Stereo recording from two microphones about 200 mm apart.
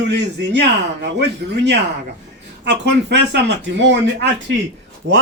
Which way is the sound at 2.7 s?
60° right (ahead or behind).